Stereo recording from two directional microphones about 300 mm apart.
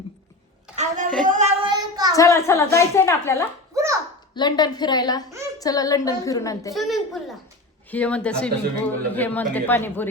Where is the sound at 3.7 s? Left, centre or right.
Centre.